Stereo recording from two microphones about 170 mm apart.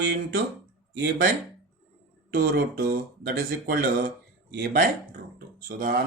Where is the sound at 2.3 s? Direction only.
65° right (ahead or behind).